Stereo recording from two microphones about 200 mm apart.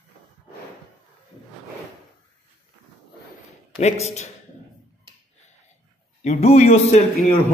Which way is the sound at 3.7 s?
35° left (ahead or behind).